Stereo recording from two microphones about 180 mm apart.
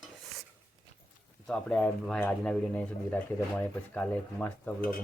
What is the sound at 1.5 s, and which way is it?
Speech, centre (ahead or behind).